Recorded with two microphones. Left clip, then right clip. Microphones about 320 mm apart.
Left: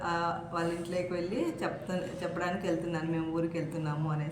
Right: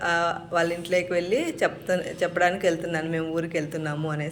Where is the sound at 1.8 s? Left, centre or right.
Right.